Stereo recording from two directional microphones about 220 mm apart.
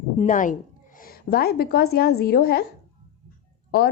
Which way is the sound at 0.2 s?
35° left (ahead or behind).